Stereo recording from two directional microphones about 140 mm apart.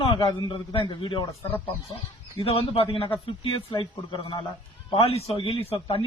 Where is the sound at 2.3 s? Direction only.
45° left (ahead or behind).